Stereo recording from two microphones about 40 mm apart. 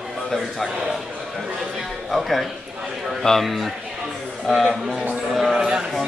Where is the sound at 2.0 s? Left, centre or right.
Centre.